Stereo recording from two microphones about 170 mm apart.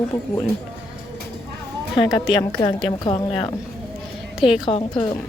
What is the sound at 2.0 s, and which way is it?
A woman's voice, 25° left (ahead or behind).